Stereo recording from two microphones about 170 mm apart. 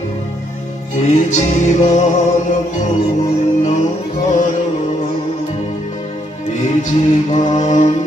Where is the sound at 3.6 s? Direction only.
45° left (ahead or behind).